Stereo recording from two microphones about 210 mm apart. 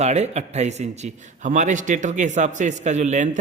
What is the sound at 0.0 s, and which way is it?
Speech, 30° right (ahead or behind).